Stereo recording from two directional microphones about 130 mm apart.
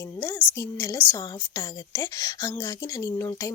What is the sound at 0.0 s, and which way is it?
Speech, 20° left (ahead or behind).